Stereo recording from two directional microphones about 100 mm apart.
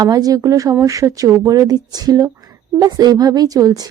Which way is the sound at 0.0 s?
40° right (ahead or behind).